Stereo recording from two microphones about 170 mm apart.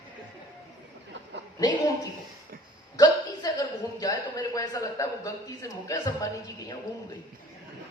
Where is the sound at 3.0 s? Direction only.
20° left (ahead or behind).